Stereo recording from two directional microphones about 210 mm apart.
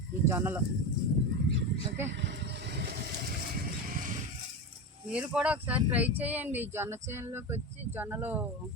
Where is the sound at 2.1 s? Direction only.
55° right (ahead or behind).